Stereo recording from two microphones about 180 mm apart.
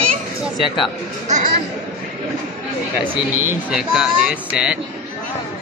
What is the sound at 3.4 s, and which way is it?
A man's voice, 15° right (ahead or behind).